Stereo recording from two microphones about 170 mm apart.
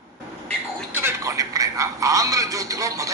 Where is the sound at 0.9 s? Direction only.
15° right (ahead or behind).